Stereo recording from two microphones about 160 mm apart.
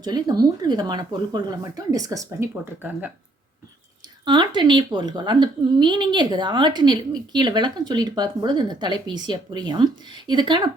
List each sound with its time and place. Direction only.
0.0 s a woman's voice: 25° right (ahead or behind)
2.6 s speech: 10° right (ahead or behind)
4.3 s a woman's voice: 30° right (ahead or behind)